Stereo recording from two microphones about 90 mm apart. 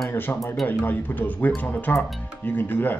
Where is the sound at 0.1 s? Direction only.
20° left (ahead or behind).